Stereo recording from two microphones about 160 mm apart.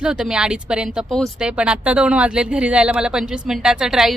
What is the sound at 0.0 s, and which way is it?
A woman's voice, 5° right (ahead or behind).